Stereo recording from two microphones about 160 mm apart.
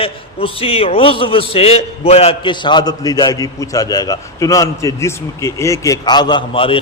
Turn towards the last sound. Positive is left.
turn(degrees=35)  # may be behind; listen again after turning